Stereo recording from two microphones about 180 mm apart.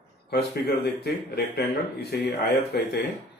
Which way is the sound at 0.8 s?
60° left (ahead or behind).